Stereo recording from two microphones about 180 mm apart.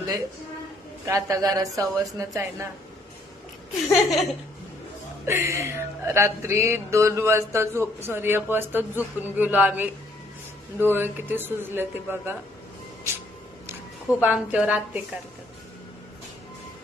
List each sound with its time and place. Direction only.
1.0 s speech: 15° right (ahead or behind)
3.9 s laughter: centre (ahead or behind)
5.2 s speech: 15° right (ahead or behind)
14.2 s speech: 5° right (ahead or behind)